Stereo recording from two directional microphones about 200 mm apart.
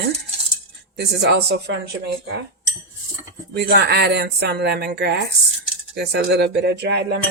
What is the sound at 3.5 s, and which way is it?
Speech, 55° right (ahead or behind).